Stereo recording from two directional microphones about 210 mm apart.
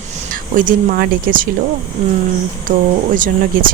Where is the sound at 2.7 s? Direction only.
40° right (ahead or behind).